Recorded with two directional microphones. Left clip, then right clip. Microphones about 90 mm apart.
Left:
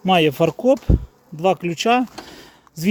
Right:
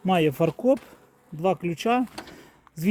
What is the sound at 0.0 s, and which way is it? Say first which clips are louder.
Speech: left 6 dB; 15° left (ahead or behind).